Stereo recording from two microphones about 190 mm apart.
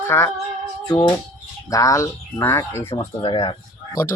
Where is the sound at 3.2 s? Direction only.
25° left (ahead or behind).